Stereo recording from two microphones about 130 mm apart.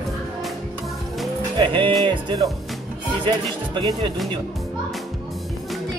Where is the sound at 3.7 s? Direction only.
35° right (ahead or behind).